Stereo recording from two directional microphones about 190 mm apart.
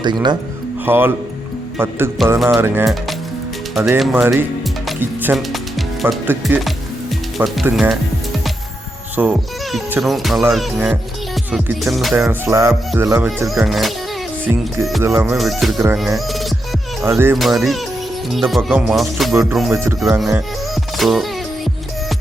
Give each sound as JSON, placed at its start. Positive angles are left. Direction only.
{"t": 0.0, "sound": "speech", "side_deg": -20}
{"t": 0.9, "sound": "speech", "side_deg": -10}
{"t": 2.2, "sound": "music", "side_deg": 0}
{"t": 2.6, "sound": "speech", "side_deg": -10}
{"t": 3.8, "sound": "music", "side_deg": 0}
{"t": 9.2, "sound": "speech", "side_deg": -10}
{"t": 9.9, "sound": "music", "side_deg": 0}
{"t": 17.0, "sound": "speech", "side_deg": -10}
{"t": 17.3, "sound": "music", "side_deg": 0}
{"t": 19.3, "sound": "speech", "side_deg": -15}
{"t": 19.5, "sound": "music", "side_deg": 0}